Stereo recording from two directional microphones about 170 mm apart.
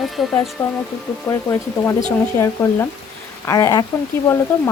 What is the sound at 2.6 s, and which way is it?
Speech, 15° left (ahead or behind).